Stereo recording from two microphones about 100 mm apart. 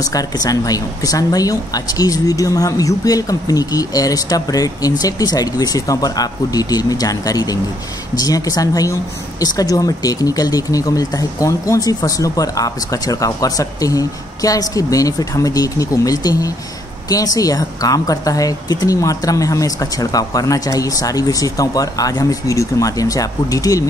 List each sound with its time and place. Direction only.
0.0 s speech: 35° left (ahead or behind)